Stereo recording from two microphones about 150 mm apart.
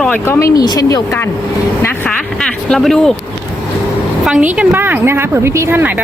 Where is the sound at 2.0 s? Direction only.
5° left (ahead or behind).